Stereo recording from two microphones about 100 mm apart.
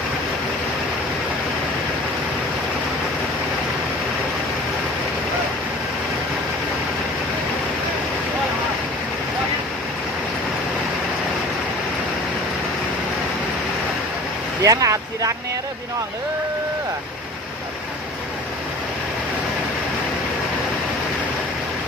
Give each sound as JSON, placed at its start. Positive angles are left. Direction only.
{"t": 14.6, "sound": "vehicle", "side_deg": -35}